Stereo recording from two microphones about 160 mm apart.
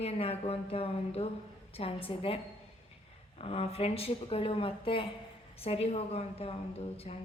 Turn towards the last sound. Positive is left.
turn(degrees=40)  # may be behind; listen again after turning